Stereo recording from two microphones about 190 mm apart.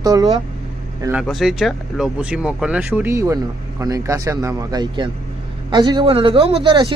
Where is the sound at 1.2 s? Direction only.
Centre (ahead or behind).